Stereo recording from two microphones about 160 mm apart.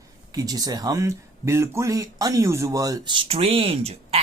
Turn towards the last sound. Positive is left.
turn(degrees=-40)  # may be behind; listen again after turning